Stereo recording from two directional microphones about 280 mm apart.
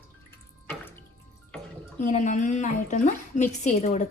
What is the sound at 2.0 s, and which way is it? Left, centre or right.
Speech, left.